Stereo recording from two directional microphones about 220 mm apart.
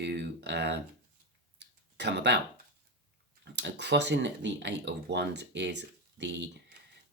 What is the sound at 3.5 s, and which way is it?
Speech, 50° right (ahead or behind).